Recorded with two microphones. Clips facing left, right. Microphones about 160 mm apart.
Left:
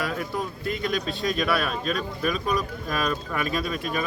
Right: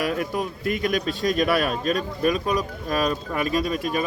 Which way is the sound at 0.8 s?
45° right (ahead or behind).